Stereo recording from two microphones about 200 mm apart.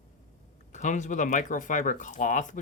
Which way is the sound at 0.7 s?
35° left (ahead or behind).